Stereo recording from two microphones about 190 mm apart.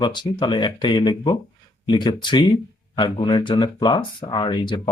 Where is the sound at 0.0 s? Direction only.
25° left (ahead or behind).